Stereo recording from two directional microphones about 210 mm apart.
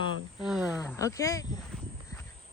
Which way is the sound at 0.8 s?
15° left (ahead or behind).